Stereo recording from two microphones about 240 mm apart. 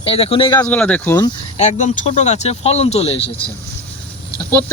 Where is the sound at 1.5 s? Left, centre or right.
Left.